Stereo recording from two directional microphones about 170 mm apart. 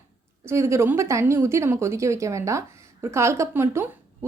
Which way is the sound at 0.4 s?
15° right (ahead or behind).